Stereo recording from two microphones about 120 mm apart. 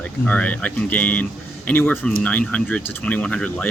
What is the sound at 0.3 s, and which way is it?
Speech, 10° left (ahead or behind).